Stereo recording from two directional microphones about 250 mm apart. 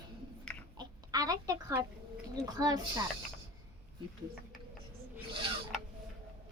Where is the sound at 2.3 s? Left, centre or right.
Centre.